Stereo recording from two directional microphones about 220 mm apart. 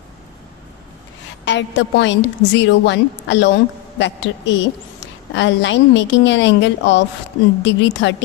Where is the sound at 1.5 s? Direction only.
55° left (ahead or behind).